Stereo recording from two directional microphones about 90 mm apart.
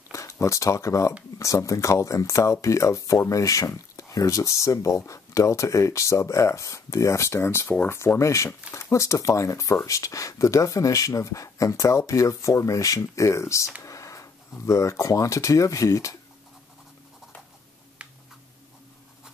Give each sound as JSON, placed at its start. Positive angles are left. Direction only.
{"t": 0.1, "sound": "speech", "side_deg": 35}